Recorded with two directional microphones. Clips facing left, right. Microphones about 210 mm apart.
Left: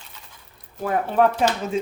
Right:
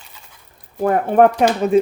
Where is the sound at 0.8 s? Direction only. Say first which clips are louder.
Right 6 dB; 50° right (ahead or behind).